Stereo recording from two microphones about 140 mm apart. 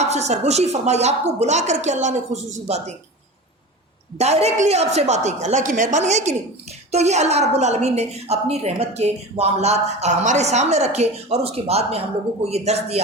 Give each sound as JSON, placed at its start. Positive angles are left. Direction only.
{"t": 0.0, "sound": "a woman's voice", "side_deg": -55}
{"t": 4.2, "sound": "a woman's voice", "side_deg": -50}